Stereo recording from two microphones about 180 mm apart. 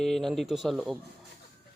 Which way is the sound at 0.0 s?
Centre (ahead or behind).